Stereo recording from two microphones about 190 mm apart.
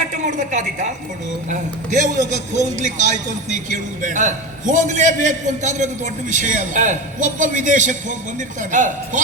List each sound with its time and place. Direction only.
0.0 s a woman's voice: 40° right (ahead or behind)